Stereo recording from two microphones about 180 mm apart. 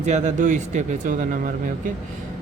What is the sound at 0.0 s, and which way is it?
Speech, 40° right (ahead or behind).